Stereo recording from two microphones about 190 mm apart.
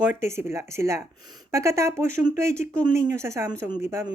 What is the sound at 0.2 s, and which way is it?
Speech, 15° right (ahead or behind).